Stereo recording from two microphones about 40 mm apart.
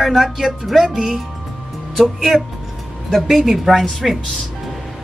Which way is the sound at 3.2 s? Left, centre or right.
Centre.